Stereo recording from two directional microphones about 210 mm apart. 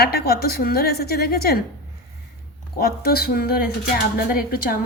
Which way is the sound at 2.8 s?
45° left (ahead or behind).